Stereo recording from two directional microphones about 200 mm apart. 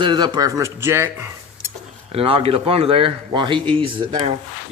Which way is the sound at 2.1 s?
30° right (ahead or behind).